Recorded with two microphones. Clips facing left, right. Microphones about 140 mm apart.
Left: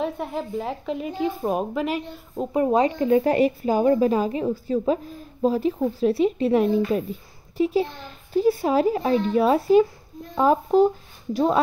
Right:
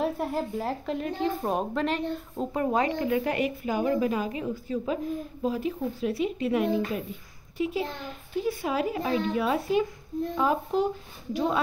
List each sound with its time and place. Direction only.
0.0 s speech: 5° right (ahead or behind)
2.6 s speech: 20° left (ahead or behind); by 11.6 s 40° left (ahead or behind)